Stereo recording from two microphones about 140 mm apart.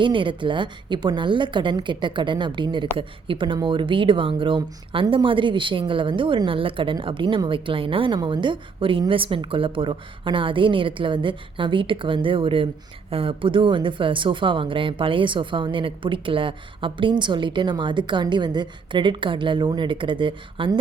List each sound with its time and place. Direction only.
0.0 s speech: 35° right (ahead or behind)